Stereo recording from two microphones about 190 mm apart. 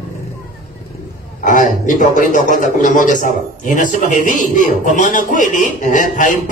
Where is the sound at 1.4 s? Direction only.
45° left (ahead or behind).